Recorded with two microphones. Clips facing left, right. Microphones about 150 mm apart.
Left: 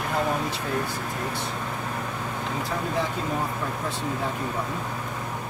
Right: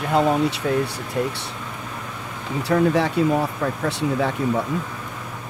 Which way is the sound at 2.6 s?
75° right (ahead or behind).